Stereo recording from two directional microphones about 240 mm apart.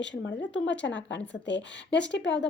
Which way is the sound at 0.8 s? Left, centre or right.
Left.